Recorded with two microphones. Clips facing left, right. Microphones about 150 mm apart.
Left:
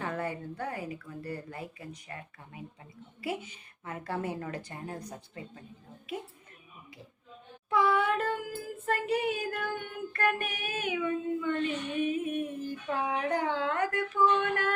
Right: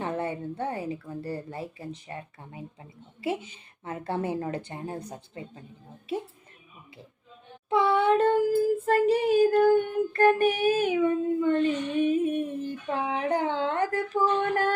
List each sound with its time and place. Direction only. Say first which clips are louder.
0.0 s a woman's voice: right 4 dB; 25° right (ahead or behind)
7.7 s a woman's voice: right 5 dB; 30° right (ahead or behind)
8.9 s child singing: right 5 dB; 30° right (ahead or behind)